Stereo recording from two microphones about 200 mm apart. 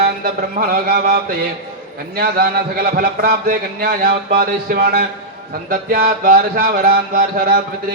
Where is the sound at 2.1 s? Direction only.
50° right (ahead or behind).